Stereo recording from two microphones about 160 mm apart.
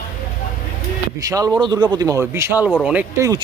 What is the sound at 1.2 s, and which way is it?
Speech, 20° right (ahead or behind).